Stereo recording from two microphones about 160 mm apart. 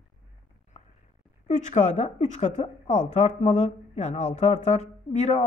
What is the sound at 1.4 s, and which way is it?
A woman's voice, 45° left (ahead or behind).